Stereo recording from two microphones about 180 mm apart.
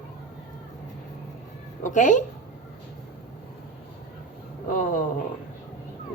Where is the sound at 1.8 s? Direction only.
45° left (ahead or behind).